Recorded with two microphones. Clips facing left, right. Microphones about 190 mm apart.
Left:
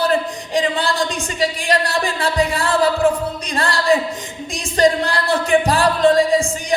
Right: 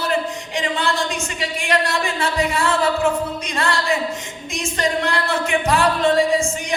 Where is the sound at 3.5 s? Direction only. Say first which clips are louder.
Left 5 dB; 35° left (ahead or behind).